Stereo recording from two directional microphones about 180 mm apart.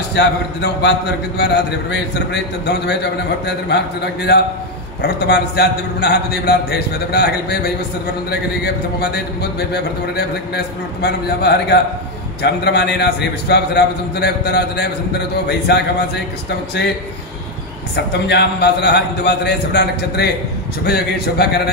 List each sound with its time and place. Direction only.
0.1 s a man's voice: 70° left (ahead or behind)
17.9 s a man's voice: 70° left (ahead or behind)